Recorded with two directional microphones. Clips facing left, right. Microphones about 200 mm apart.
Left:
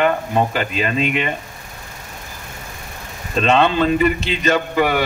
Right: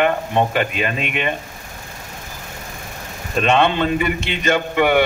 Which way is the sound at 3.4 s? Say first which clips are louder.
Left 1 dB; 35° left (ahead or behind).